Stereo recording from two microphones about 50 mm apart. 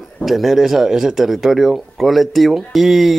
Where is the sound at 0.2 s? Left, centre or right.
Centre.